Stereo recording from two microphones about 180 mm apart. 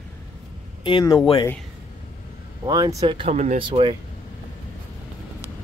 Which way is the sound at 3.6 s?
25° right (ahead or behind).